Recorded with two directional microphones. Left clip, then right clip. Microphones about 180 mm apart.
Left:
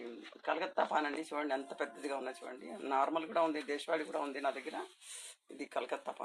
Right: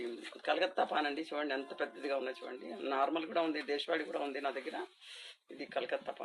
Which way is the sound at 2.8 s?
65° left (ahead or behind).